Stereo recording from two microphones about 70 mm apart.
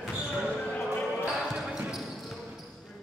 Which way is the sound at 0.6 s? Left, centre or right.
Centre.